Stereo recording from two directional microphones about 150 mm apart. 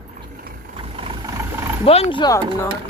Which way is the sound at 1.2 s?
20° right (ahead or behind).